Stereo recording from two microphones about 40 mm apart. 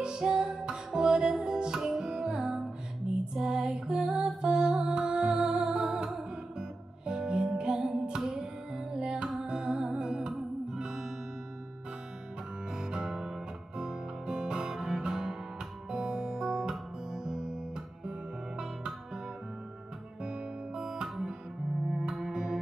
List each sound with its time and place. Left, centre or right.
0.0 s music: centre
7.1 s music: centre
12.7 s music: centre
20.2 s guitar: centre
22.3 s music: centre